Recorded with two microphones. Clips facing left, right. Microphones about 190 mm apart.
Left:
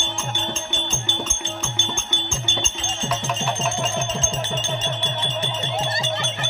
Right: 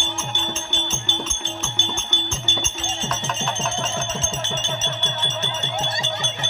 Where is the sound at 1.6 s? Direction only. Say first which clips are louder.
Even; 10° left (ahead or behind).